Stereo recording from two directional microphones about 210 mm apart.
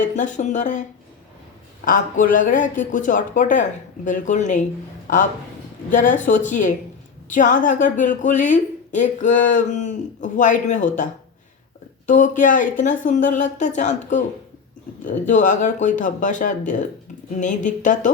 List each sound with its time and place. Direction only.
0.0 s a woman's voice: 35° left (ahead or behind)